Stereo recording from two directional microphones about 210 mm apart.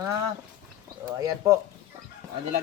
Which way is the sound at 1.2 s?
15° right (ahead or behind).